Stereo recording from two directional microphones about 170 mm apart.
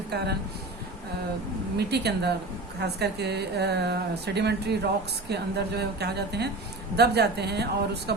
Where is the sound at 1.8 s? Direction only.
75° right (ahead or behind).